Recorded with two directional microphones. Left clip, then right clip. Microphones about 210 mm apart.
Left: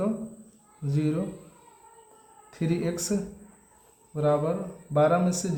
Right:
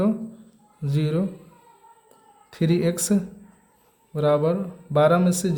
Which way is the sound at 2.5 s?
45° right (ahead or behind).